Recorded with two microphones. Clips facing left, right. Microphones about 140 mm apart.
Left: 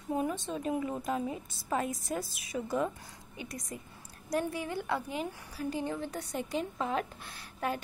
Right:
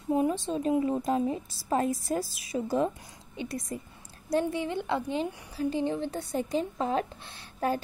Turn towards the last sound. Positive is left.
turn(degrees=-35)  # may be behind; listen again after turning